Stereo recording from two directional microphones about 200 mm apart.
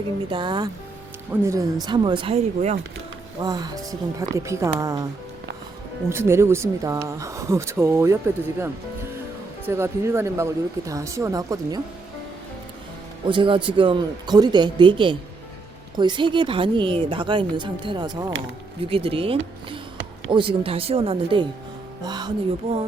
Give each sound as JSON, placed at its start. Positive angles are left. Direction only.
{"t": 0.3, "sound": "speech", "side_deg": -25}
{"t": 3.4, "sound": "speech", "side_deg": -20}
{"t": 6.1, "sound": "speech", "side_deg": -10}
{"t": 9.6, "sound": "speech", "side_deg": -15}
{"t": 13.3, "sound": "speech", "side_deg": -25}